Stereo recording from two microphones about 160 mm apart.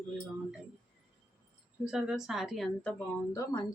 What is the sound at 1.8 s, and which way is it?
Speech, 5° right (ahead or behind).